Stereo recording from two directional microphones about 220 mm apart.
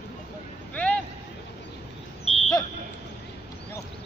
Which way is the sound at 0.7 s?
5° left (ahead or behind).